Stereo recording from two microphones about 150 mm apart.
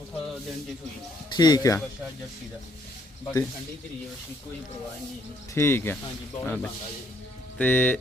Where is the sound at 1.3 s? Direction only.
25° left (ahead or behind).